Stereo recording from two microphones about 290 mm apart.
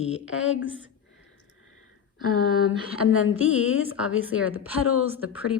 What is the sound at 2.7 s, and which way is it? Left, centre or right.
A woman's voice, left.